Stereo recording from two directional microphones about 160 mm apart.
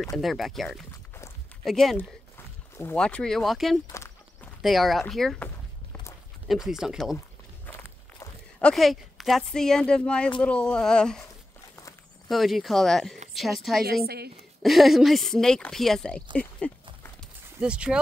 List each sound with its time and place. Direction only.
0.2 s speech: centre (ahead or behind)
2.0 s speech: 15° left (ahead or behind)
3.8 s horse: 15° left (ahead or behind)
4.6 s speech: centre (ahead or behind)
8.5 s speech: 5° left (ahead or behind)
12.3 s speech: centre (ahead or behind)
14.0 s a woman's voice: 80° right
14.6 s speech: centre (ahead or behind)
17.2 s walk: 5° right (ahead or behind)